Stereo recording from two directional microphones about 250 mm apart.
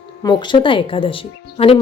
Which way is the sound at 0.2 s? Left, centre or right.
Centre.